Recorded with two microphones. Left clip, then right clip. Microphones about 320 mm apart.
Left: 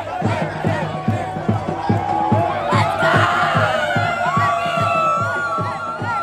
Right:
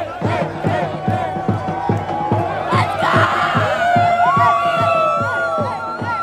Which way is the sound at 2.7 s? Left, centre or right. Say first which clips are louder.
Right 1 dB; centre.